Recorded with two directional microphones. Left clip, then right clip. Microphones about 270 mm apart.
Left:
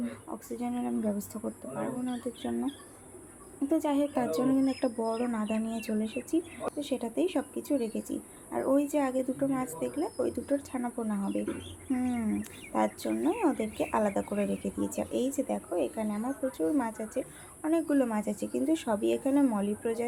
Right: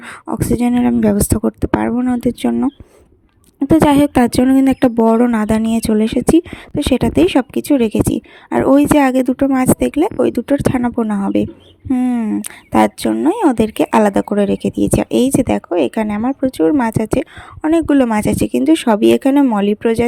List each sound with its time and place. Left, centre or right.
0.0 s speech: right
3.7 s speech: right